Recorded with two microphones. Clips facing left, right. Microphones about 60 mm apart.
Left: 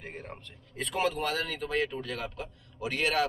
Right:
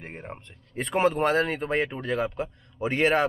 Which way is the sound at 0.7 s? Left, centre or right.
Right.